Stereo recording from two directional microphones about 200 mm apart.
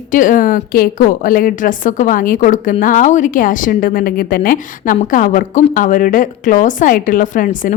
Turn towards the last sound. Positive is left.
turn(degrees=40)  # may be behind; listen again after turning